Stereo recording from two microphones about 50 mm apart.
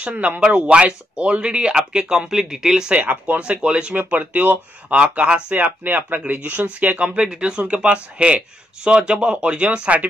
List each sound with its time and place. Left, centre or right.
0.0 s speech: right; by 2.9 s centre
2.9 s speech: right
4.1 s speech: right
4.8 s speech: right
7.2 s speech: centre